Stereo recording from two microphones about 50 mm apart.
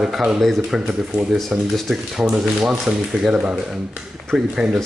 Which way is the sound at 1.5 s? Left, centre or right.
Right.